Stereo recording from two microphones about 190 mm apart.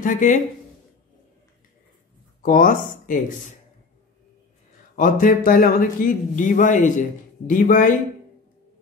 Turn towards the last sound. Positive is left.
turn(degrees=45)  # may be behind; listen again after turning